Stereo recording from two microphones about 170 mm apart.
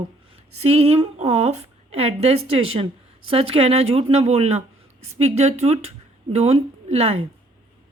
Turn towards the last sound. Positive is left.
turn(degrees=-35)  # may be behind; listen again after turning